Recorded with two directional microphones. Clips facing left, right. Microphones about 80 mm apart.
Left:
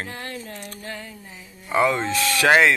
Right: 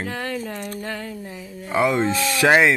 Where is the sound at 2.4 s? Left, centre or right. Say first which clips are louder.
Right 1 dB; centre.